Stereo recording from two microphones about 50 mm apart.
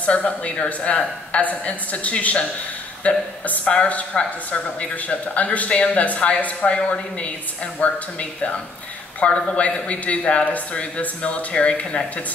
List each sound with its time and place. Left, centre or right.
0.0 s a man's voice: left